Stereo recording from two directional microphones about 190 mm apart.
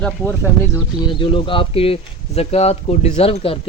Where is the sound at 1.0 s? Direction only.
25° left (ahead or behind).